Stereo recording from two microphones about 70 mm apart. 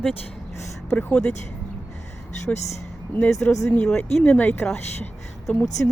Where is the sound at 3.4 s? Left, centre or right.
Left.